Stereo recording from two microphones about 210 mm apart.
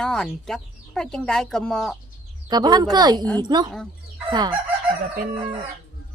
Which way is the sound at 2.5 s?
20° right (ahead or behind).